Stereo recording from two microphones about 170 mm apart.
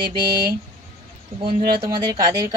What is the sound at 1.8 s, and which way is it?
Speech, 20° right (ahead or behind).